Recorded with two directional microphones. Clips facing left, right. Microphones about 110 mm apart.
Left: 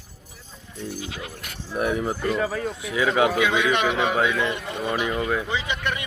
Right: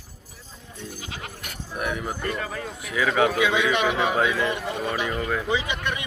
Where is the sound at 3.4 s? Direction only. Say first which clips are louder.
Left 1 dB; 10° right (ahead or behind).